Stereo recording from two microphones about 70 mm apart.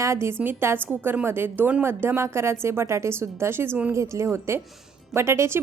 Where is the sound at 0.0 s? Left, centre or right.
Right.